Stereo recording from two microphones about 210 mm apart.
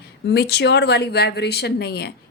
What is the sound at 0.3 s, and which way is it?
A woman's voice, 50° left (ahead or behind).